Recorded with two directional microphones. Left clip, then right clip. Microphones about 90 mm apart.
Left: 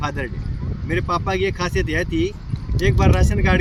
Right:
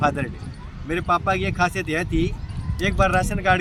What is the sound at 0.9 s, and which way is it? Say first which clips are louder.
Speech: right 1 dB; 30° right (ahead or behind).